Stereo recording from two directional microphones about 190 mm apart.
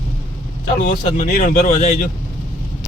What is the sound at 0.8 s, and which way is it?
Speech, 40° left (ahead or behind).